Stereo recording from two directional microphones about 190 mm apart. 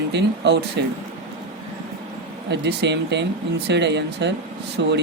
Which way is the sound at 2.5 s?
65° right (ahead or behind).